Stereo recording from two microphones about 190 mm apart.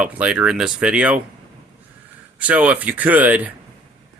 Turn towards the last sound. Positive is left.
turn(degrees=-10)  # may be behind; listen again after turning